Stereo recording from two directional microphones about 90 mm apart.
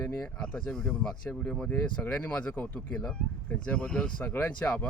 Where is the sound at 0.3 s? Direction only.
10° left (ahead or behind).